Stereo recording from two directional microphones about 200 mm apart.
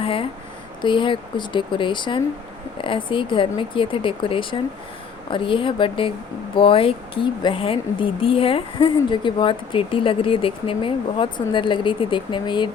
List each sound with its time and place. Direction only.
0.0 s speech: 25° left (ahead or behind)